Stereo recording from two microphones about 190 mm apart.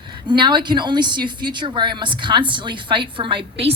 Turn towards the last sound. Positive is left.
turn(degrees=-30)  # may be behind; listen again after turning